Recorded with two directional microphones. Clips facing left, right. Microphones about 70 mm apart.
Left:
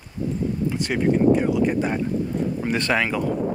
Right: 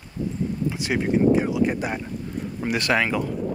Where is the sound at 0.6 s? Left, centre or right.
Centre.